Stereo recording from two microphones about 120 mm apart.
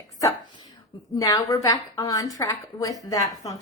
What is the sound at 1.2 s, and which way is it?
A woman's voice, 30° left (ahead or behind).